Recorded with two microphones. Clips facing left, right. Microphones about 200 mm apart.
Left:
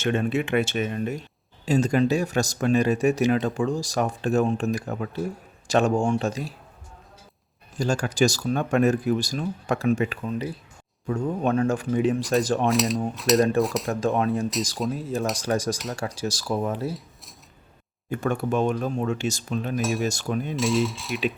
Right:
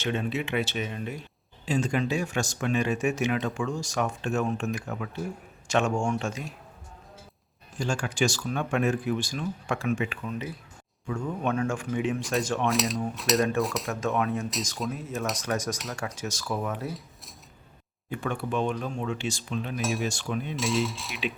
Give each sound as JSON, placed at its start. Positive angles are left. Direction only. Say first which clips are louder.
{"t": 0.0, "sound": "speech", "louder": "left 5 dB", "side_deg": 50}
{"t": 7.8, "sound": "speech", "louder": "left 5 dB", "side_deg": 40}
{"t": 12.6, "sound": "cutlery", "louder": "left 4 dB", "side_deg": 0}
{"t": 13.9, "sound": "speech", "louder": "left 4 dB", "side_deg": 35}
{"t": 18.1, "sound": "speech", "louder": "left 5 dB", "side_deg": 45}
{"t": 19.8, "sound": "cutlery", "louder": "left 3 dB", "side_deg": 0}
{"t": 20.1, "sound": "speech", "louder": "left 4 dB", "side_deg": 40}
{"t": 20.6, "sound": "cutlery", "louder": "left 4 dB", "side_deg": 0}